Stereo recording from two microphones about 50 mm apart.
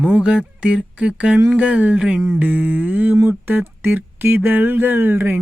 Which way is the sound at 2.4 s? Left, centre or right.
Right.